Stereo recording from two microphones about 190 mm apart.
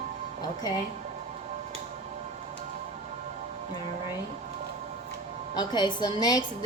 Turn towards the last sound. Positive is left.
turn(degrees=20)  # may be behind; listen again after turning